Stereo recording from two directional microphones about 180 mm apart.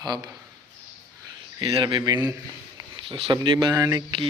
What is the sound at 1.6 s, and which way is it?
Speech, 25° right (ahead or behind).